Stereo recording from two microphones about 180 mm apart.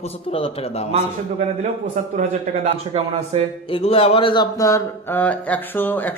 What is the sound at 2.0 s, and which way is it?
Speech, 40° right (ahead or behind).